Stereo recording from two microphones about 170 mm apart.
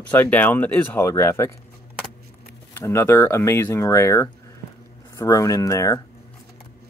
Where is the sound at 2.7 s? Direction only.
15° left (ahead or behind).